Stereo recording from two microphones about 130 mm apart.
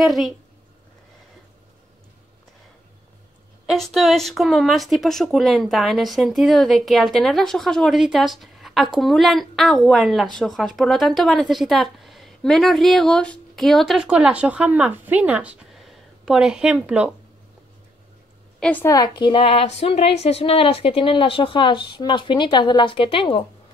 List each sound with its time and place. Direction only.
0.0 s speech: centre (ahead or behind)
3.6 s speech: centre (ahead or behind)
18.6 s a woman's voice: 10° left (ahead or behind)
18.9 s a woman's voice: 35° left (ahead or behind)